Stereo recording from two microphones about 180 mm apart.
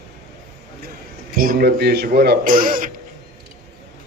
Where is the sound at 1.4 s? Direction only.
55° right (ahead or behind).